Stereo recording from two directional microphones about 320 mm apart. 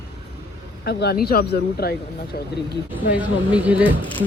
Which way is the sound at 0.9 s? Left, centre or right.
Left.